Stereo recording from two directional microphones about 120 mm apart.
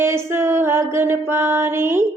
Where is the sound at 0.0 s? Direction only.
20° right (ahead or behind).